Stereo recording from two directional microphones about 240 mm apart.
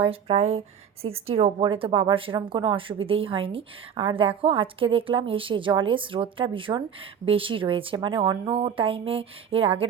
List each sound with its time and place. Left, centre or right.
0.0 s a woman's voice: right